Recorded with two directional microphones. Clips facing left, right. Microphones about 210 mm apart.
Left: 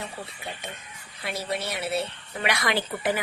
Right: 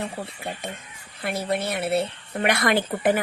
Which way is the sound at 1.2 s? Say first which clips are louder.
Right 5 dB; 55° right (ahead or behind).